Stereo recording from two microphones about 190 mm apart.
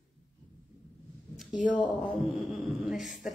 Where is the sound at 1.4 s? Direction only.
Centre (ahead or behind).